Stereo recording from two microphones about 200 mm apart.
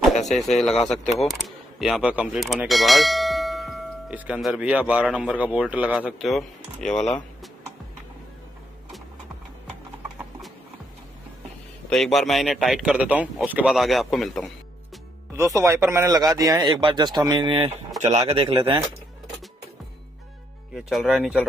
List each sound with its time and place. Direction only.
0.6 s speech: centre (ahead or behind)
11.9 s speech: centre (ahead or behind)
15.3 s speech: 15° right (ahead or behind)
20.7 s speech: 5° right (ahead or behind)